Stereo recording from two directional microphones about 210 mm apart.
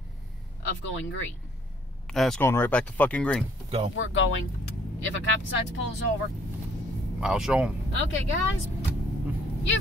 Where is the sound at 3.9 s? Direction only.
70° left (ahead or behind).